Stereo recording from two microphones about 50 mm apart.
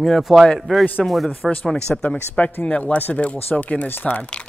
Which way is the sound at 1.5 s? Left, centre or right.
Left.